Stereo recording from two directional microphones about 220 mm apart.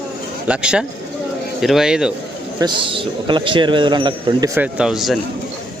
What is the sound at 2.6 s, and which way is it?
Speech, 25° right (ahead or behind).